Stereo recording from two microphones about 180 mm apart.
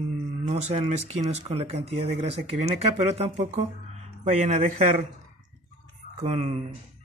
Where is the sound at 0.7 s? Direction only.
40° right (ahead or behind).